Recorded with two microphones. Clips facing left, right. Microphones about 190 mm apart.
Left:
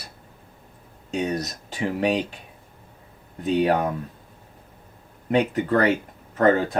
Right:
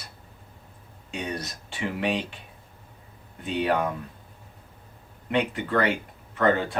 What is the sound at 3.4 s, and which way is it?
Speech, 40° left (ahead or behind).